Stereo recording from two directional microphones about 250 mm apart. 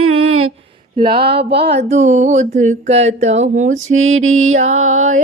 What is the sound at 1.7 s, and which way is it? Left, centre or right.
Music, right.